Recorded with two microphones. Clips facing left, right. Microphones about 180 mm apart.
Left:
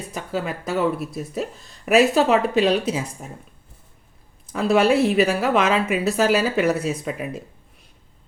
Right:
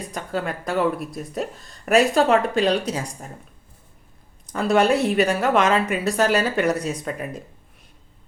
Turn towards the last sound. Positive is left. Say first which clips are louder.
# left 2 dB
turn(degrees=5)  # may be behind; listen again after turning